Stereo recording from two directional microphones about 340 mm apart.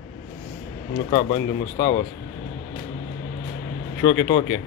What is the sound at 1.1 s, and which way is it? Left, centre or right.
Speech, left.